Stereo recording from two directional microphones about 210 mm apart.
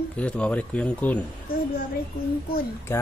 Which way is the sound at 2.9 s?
10° left (ahead or behind).